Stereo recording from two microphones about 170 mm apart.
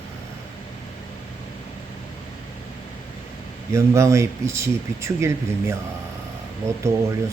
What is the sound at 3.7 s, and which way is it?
Speech, 15° right (ahead or behind).